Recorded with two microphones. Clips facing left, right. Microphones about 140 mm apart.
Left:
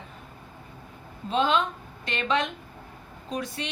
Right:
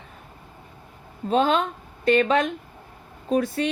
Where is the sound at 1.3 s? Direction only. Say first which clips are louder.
Right 3 dB; 45° right (ahead or behind).